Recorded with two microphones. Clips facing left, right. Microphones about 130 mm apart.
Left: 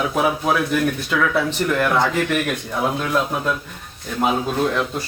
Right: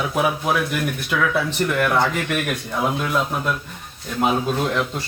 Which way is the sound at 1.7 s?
15° left (ahead or behind).